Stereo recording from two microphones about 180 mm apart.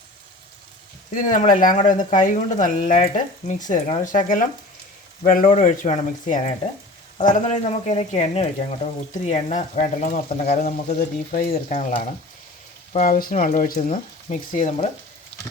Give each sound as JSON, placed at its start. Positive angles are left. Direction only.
{"t": 1.1, "sound": "speech", "side_deg": 45}
{"t": 15.3, "sound": "pig", "side_deg": 5}